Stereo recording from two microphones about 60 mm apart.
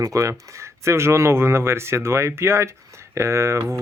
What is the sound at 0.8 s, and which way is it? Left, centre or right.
Speech, right.